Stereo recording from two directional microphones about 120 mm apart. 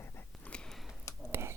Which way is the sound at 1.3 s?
20° right (ahead or behind).